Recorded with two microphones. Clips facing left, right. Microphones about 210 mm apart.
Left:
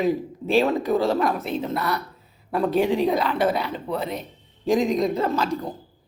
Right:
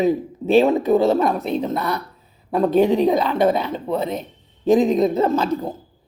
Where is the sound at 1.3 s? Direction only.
40° right (ahead or behind).